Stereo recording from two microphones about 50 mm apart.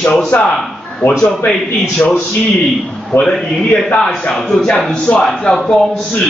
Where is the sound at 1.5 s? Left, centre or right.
Left.